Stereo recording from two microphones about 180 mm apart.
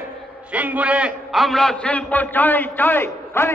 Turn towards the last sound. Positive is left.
turn(degrees=15)  # may be behind; listen again after turning